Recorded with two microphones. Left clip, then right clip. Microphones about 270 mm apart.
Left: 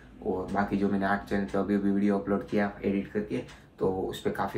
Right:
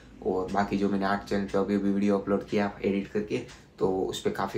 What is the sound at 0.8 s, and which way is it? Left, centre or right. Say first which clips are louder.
Speech: right 1 dB; centre.